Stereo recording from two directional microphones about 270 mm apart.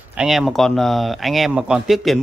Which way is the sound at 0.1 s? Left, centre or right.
Centre.